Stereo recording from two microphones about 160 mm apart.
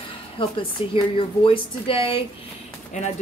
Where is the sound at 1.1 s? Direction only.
35° left (ahead or behind).